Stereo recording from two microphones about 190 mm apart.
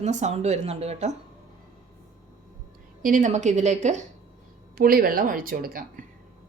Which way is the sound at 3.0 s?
45° right (ahead or behind).